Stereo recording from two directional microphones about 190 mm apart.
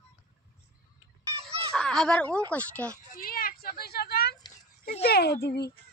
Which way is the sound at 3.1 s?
50° left (ahead or behind).